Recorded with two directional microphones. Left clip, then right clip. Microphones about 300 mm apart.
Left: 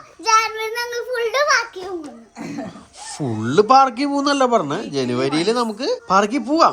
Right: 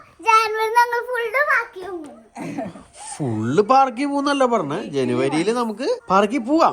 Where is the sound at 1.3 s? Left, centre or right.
Centre.